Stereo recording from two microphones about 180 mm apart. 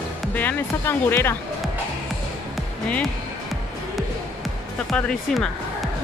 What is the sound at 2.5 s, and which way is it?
Music, 5° left (ahead or behind).